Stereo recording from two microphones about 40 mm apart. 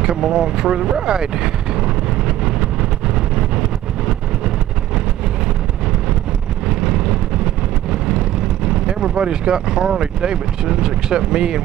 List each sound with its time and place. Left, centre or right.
0.0 s speech: centre
6.7 s vehicle: right
8.6 s speech: right